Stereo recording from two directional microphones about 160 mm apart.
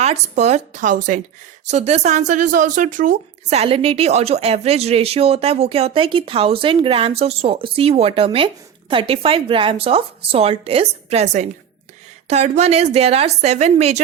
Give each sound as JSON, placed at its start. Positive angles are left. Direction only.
{"t": 0.0, "sound": "a woman's voice", "side_deg": -45}
{"t": 1.7, "sound": "a woman's voice", "side_deg": -40}